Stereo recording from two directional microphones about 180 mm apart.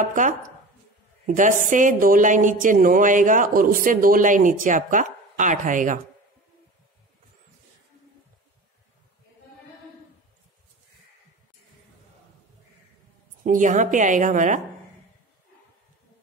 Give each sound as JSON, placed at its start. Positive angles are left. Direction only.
{"t": 0.0, "sound": "a woman's voice", "side_deg": -45}
{"t": 13.4, "sound": "a woman's voice", "side_deg": -45}